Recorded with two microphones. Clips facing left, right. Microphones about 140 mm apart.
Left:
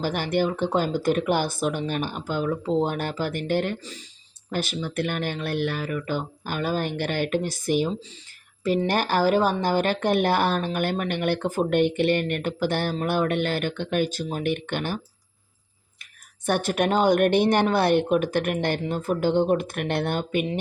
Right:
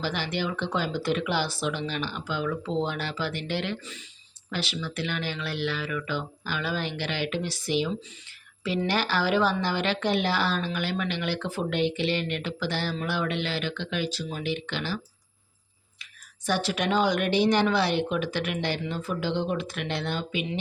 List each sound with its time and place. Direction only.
0.0 s speech: 50° left (ahead or behind)
16.5 s speech: 50° left (ahead or behind)